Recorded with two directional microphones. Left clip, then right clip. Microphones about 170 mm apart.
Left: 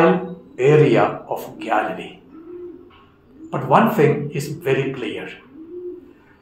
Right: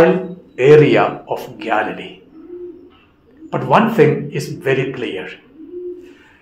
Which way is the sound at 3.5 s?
25° right (ahead or behind).